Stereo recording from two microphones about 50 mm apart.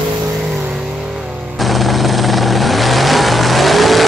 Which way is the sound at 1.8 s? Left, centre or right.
Centre.